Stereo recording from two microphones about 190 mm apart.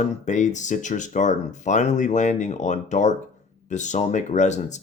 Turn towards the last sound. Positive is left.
turn(degrees=40)  # may be behind; listen again after turning